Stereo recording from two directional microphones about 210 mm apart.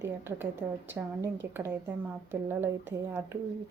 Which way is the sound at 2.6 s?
10° right (ahead or behind).